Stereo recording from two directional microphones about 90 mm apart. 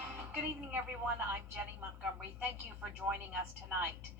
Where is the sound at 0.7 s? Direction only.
15° right (ahead or behind).